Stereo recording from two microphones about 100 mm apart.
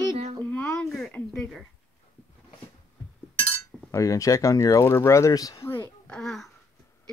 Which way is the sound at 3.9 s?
30° left (ahead or behind).